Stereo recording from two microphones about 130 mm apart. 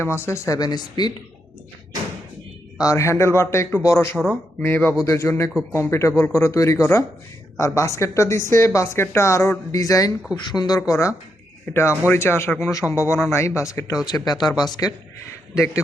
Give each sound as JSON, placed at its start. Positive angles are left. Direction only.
{"t": 0.0, "sound": "speech", "side_deg": 20}
{"t": 2.7, "sound": "speech", "side_deg": 25}
{"t": 10.8, "sound": "speech", "side_deg": 20}